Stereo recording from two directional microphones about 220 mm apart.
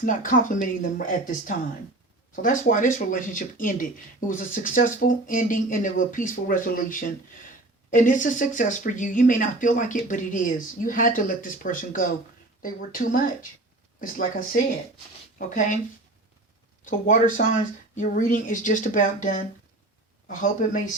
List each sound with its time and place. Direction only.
0.0 s speech: 40° left (ahead or behind)
7.9 s speech: 35° left (ahead or behind)
16.8 s speech: 35° left (ahead or behind)